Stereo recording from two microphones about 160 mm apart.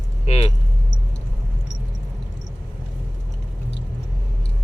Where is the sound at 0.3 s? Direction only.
40° left (ahead or behind).